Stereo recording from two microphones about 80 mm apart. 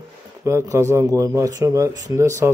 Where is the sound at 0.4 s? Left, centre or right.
Right.